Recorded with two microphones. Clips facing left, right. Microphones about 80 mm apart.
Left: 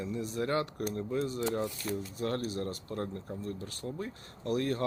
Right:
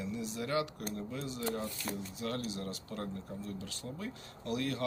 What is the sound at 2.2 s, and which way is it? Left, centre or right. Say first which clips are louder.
Speech: left 5 dB; left.